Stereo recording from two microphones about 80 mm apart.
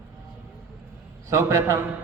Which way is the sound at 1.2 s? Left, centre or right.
Right.